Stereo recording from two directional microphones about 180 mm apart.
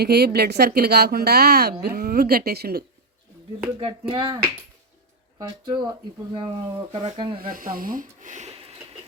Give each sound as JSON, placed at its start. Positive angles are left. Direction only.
{"t": 0.0, "sound": "speech", "side_deg": -65}
{"t": 3.8, "sound": "speech", "side_deg": -30}
{"t": 7.3, "sound": "speech", "side_deg": -50}